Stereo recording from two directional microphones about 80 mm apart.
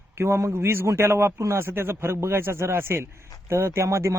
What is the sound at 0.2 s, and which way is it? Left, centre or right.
Speech, right.